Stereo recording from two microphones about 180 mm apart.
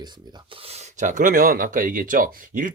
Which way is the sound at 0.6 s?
35° right (ahead or behind).